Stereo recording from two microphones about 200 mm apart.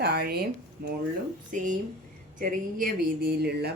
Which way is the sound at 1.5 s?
40° right (ahead or behind).